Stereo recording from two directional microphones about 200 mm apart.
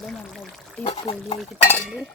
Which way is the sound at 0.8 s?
30° left (ahead or behind).